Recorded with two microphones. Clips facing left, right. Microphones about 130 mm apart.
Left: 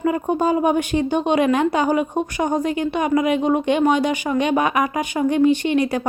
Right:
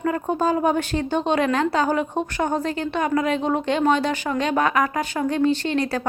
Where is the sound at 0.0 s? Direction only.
10° left (ahead or behind).